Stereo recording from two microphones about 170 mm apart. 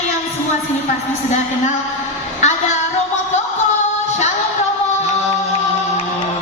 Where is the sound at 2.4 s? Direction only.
45° left (ahead or behind).